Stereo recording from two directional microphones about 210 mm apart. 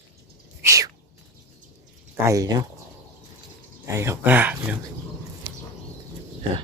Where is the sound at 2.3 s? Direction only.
15° right (ahead or behind).